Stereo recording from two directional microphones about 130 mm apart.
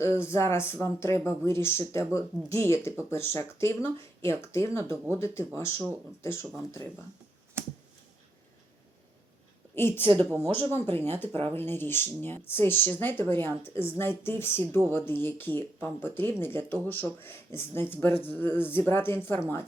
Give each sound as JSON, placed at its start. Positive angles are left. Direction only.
{"t": 0.2, "sound": "speech", "side_deg": 20}
{"t": 9.7, "sound": "speech", "side_deg": 15}